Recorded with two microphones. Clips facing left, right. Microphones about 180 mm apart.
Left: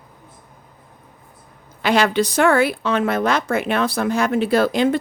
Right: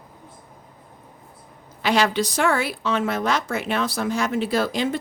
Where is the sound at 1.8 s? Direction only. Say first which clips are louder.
Left 3 dB; 55° left (ahead or behind).